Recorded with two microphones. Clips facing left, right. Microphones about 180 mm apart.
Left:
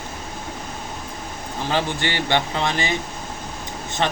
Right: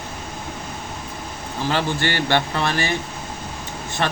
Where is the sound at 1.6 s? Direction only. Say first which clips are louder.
Right 1 dB; 15° left (ahead or behind).